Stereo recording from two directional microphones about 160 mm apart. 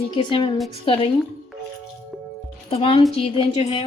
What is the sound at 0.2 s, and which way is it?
Speech, 30° left (ahead or behind).